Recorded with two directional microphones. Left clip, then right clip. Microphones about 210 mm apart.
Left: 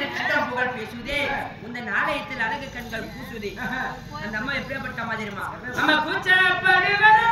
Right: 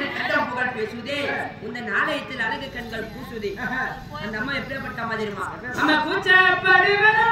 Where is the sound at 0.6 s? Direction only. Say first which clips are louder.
Right 1 dB; 5° left (ahead or behind).